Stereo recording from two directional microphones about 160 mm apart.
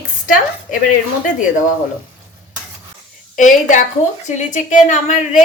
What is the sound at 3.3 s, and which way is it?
A woman's voice, 55° left (ahead or behind).